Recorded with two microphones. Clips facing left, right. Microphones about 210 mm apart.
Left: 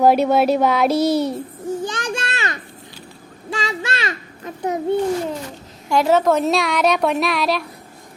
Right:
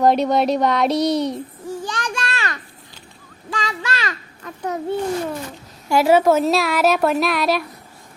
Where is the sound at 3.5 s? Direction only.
25° left (ahead or behind).